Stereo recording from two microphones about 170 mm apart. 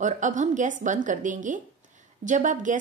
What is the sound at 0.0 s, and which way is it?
Speech, 45° right (ahead or behind).